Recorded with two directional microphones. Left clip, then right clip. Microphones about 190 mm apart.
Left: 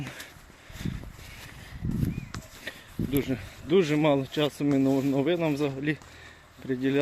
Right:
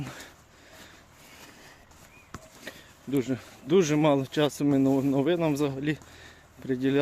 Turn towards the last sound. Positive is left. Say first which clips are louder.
# right 1 dB
turn(degrees=-15)  # may be behind; listen again after turning